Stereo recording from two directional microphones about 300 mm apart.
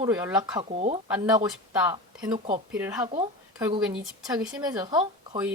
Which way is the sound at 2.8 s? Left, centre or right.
Centre.